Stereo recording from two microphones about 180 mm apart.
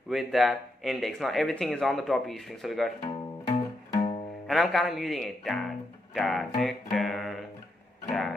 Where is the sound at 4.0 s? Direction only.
30° left (ahead or behind).